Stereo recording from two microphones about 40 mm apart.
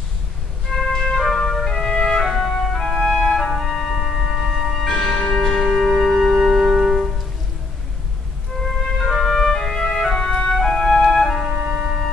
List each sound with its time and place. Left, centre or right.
0.7 s music: centre
4.7 s music: centre
9.0 s music: centre
10.1 s music: left
10.5 s music: centre
11.2 s music: centre
11.6 s music: centre